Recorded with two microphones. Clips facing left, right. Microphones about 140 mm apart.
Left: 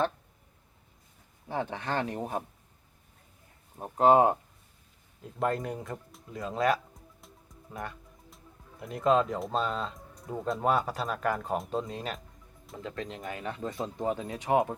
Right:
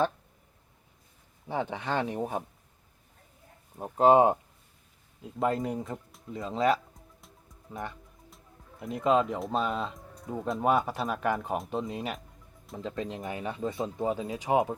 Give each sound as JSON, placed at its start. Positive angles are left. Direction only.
{"t": 1.5, "sound": "speech", "side_deg": -15}
{"t": 3.9, "sound": "speech", "side_deg": -20}
{"t": 5.2, "sound": "speech", "side_deg": -5}
{"t": 6.7, "sound": "music", "side_deg": 0}
{"t": 8.8, "sound": "speech", "side_deg": 0}
{"t": 11.9, "sound": "speech", "side_deg": -15}